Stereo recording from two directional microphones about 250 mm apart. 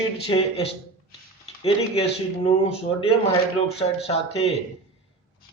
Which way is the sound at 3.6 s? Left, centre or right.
Left.